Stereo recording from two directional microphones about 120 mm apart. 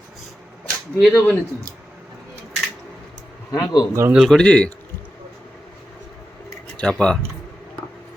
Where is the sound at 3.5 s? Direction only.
35° left (ahead or behind).